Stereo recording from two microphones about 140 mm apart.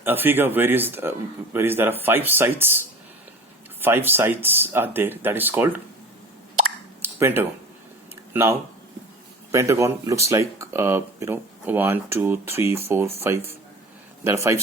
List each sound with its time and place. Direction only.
0.0 s speech: 15° right (ahead or behind)
7.0 s a sound: 15° right (ahead or behind)
9.5 s a man's voice: 20° right (ahead or behind)